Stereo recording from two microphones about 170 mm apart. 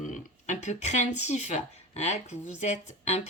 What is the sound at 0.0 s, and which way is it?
Speech, 45° left (ahead or behind).